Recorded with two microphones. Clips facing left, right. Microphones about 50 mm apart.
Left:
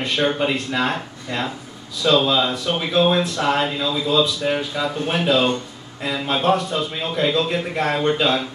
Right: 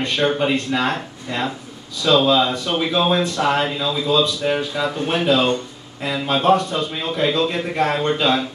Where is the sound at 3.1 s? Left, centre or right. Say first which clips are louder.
Right 1 dB; centre.